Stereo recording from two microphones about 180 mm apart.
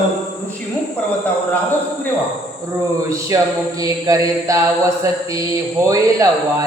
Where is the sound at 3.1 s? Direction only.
15° right (ahead or behind).